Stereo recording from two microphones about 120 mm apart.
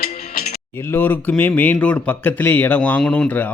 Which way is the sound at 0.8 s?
15° left (ahead or behind).